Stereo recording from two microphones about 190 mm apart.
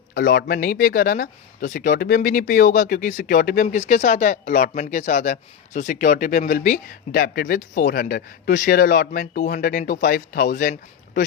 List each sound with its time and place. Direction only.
0.1 s speech: 50° left (ahead or behind)